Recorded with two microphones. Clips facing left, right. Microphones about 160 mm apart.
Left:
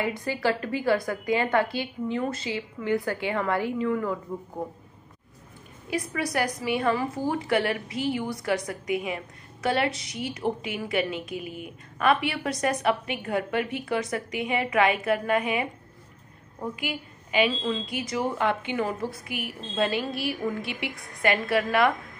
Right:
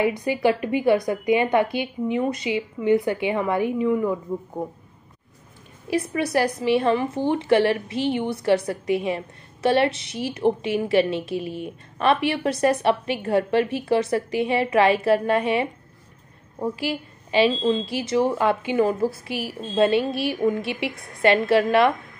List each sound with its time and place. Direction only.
0.0 s a woman's voice: 20° right (ahead or behind)
5.9 s a woman's voice: 25° right (ahead or behind)
16.8 s a woman's voice: 30° right (ahead or behind)